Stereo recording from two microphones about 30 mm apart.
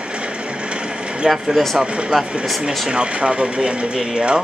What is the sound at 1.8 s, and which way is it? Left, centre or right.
Speech, right.